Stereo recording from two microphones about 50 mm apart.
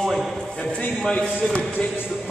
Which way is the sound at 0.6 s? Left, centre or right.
Left.